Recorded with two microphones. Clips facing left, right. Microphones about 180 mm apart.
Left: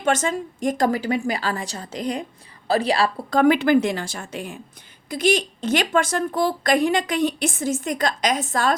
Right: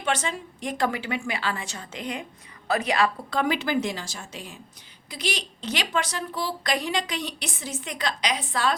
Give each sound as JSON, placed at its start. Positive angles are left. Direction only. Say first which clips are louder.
{"t": 0.0, "sound": "a woman's voice", "louder": "left 6 dB", "side_deg": 45}